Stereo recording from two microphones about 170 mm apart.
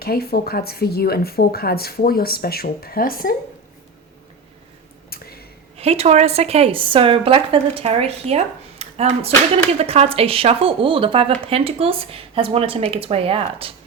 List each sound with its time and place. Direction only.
0.0 s speech: 65° left (ahead or behind)
5.1 s a sound: 65° left (ahead or behind)
5.7 s speech: 35° right (ahead or behind)